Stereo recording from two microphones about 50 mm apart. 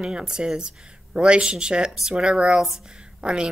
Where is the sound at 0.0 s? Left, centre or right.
Centre.